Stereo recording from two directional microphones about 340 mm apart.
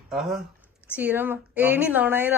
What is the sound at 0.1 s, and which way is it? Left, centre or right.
A woman's voice, centre.